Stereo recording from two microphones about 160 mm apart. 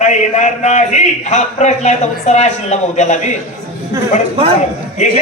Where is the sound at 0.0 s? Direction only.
45° left (ahead or behind).